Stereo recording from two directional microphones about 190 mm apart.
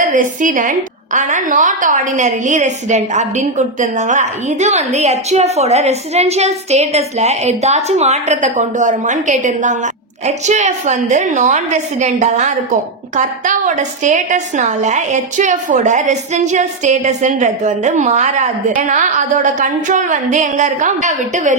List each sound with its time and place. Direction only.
0.0 s a woman's voice: 45° right (ahead or behind)
14.0 s a woman's voice: 40° right (ahead or behind)